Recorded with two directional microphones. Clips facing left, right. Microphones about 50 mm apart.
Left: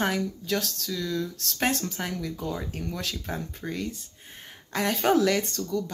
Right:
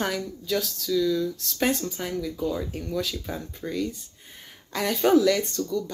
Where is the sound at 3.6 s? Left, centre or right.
Centre.